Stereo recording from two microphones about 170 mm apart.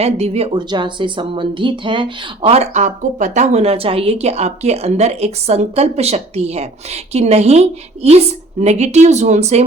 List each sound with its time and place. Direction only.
0.0 s speech: 40° right (ahead or behind)